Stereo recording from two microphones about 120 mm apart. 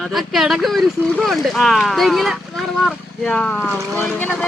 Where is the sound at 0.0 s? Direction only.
Centre (ahead or behind).